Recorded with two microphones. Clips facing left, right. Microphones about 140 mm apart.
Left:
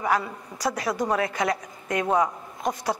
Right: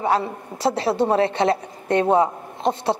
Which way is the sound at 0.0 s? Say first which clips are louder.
Right 4 dB; 25° right (ahead or behind).